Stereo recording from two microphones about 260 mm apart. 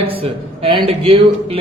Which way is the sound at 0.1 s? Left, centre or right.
Right.